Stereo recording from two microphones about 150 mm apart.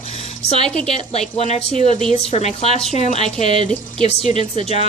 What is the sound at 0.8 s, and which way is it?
Speech, 45° left (ahead or behind).